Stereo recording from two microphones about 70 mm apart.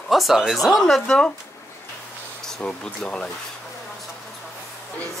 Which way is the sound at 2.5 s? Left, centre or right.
Centre.